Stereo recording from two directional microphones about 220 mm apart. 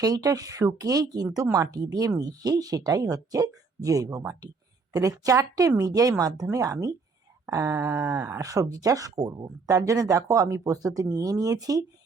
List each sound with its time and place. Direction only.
0.0 s speech: 15° right (ahead or behind)